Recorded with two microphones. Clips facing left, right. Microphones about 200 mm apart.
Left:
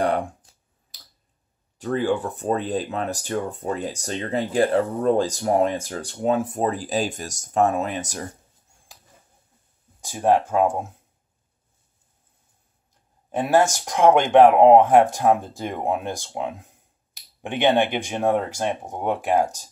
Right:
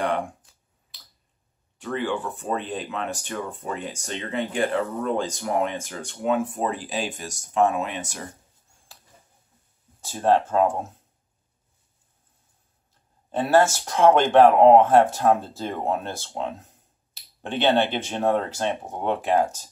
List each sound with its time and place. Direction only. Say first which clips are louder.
1.8 s speech: left 5 dB; 40° left (ahead or behind)
10.0 s speech: left 1 dB; 15° left (ahead or behind)
13.3 s speech: even; 15° left (ahead or behind)